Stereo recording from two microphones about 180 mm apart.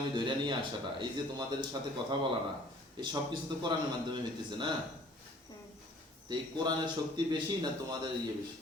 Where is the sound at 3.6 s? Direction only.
25° right (ahead or behind).